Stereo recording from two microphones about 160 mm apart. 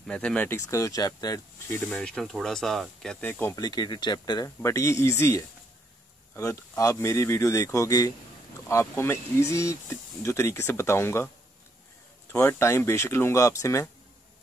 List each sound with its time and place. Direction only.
0.0 s speech: 5° left (ahead or behind)
1.9 s speech: 5° left (ahead or behind)
3.5 s speech: 25° left (ahead or behind)
12.3 s speech: 15° left (ahead or behind)